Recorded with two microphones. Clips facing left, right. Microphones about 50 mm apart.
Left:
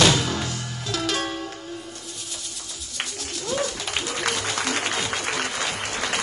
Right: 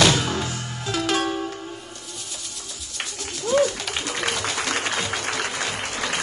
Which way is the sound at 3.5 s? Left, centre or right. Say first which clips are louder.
Right 7 dB; right.